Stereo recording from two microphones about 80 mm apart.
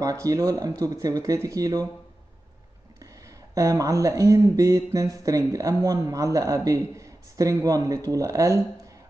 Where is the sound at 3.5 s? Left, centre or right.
Right.